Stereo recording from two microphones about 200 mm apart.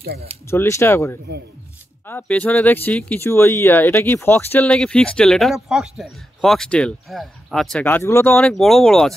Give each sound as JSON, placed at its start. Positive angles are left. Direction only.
{"t": 0.0, "sound": "speech", "side_deg": -50}
{"t": 0.5, "sound": "speech", "side_deg": 15}